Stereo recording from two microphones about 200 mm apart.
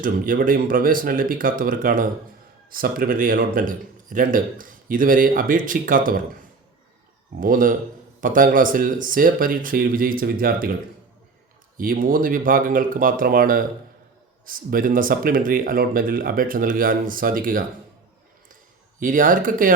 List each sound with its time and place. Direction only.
0.0 s a man's voice: 45° right (ahead or behind)
7.3 s a man's voice: 45° right (ahead or behind)
11.8 s a man's voice: 45° right (ahead or behind)
18.9 s a man's voice: 40° right (ahead or behind)